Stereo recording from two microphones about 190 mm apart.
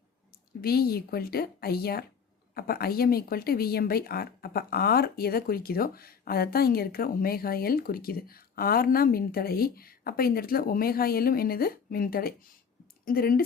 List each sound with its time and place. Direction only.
0.6 s speech: 55° left (ahead or behind)